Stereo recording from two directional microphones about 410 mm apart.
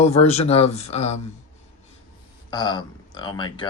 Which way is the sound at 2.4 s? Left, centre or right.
Centre.